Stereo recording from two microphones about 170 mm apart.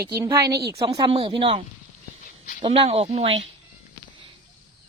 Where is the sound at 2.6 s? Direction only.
35° right (ahead or behind).